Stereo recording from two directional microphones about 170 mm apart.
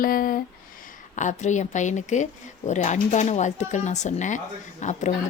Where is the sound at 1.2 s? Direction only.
45° left (ahead or behind).